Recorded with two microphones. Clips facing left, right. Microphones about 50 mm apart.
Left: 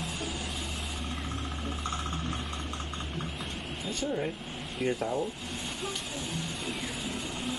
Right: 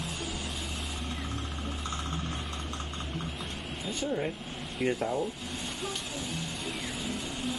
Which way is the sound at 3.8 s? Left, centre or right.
Centre.